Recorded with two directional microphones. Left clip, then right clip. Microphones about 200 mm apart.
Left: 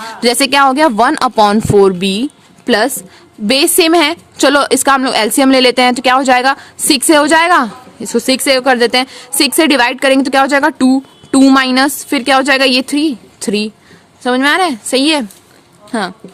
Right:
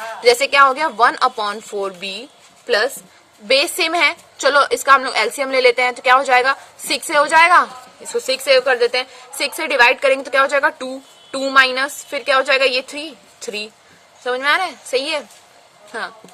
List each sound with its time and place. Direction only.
0.2 s a woman's voice: 45° left (ahead or behind)